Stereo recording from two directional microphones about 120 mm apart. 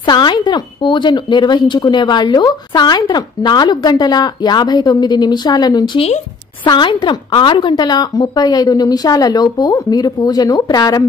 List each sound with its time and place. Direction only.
0.0 s speech: 40° left (ahead or behind)
5.9 s speech: 60° left (ahead or behind)
6.6 s speech: 40° left (ahead or behind)